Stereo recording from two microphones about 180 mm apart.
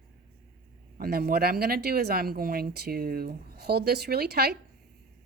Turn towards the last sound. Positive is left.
turn(degrees=-60)  # may be behind; listen again after turning